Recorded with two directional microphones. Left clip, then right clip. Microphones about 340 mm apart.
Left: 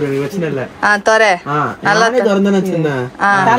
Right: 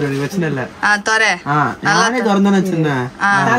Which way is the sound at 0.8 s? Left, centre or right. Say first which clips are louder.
Left 3 dB; centre.